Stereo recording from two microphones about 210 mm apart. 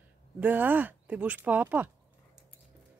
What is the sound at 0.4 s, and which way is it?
Speech, 10° right (ahead or behind).